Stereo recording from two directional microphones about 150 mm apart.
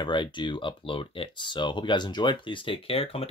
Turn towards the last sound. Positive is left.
turn(degrees=40)  # may be behind; listen again after turning